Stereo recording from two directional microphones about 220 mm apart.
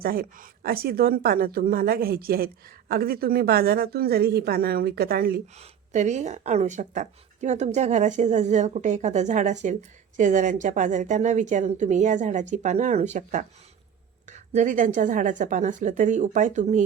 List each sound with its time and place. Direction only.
0.0 s a woman's voice: 40° right (ahead or behind)
5.5 s speech: 30° right (ahead or behind)
14.5 s speech: 35° right (ahead or behind)